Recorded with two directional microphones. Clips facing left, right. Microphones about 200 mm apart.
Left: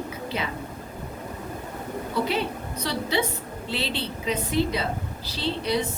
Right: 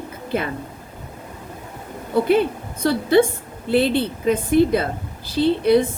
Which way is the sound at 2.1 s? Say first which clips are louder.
Right 10 dB; 50° right (ahead or behind).